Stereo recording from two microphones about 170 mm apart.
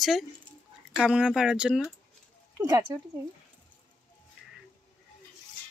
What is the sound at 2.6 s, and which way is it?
Speech, 20° right (ahead or behind).